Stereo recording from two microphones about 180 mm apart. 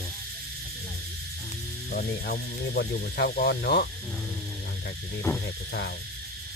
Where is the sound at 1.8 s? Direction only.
55° left (ahead or behind).